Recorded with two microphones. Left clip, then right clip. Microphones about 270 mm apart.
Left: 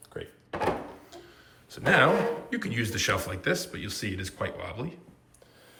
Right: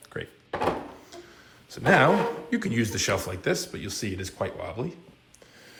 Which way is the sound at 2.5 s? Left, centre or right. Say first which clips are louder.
Right 3 dB; centre.